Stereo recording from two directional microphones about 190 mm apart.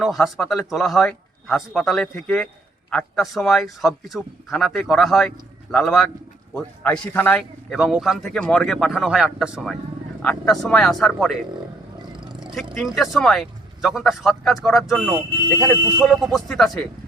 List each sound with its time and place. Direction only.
0.0 s a man's voice: centre (ahead or behind)
7.7 s speech: centre (ahead or behind)
12.1 s vehicle: 25° right (ahead or behind)
12.7 s speech: centre (ahead or behind)